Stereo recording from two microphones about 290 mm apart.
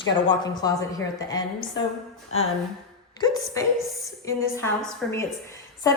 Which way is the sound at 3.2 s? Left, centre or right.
Centre.